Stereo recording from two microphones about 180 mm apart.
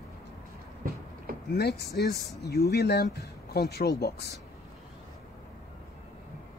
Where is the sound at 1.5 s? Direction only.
65° left (ahead or behind).